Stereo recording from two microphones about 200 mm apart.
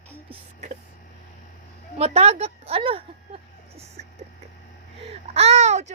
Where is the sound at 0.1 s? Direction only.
35° right (ahead or behind).